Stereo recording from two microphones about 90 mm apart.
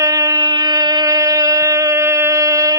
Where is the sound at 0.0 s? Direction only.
40° right (ahead or behind).